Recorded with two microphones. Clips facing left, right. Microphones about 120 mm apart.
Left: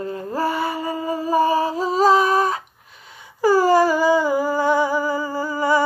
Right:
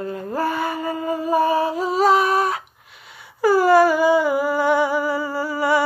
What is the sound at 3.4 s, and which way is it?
Humming, 35° left (ahead or behind).